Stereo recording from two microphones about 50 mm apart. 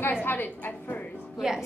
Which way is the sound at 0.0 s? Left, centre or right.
Left.